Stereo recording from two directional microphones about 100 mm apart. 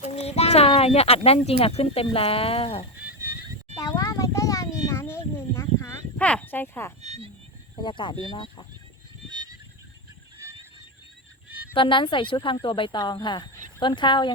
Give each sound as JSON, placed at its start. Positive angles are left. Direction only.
{"t": 0.0, "sound": "speech", "side_deg": 90}
{"t": 3.8, "sound": "a sound", "side_deg": 40}
{"t": 6.1, "sound": "speech", "side_deg": 15}
{"t": 7.0, "sound": "a sound", "side_deg": -90}
{"t": 7.8, "sound": "speech", "side_deg": 55}
{"t": 11.7, "sound": "speech", "side_deg": 55}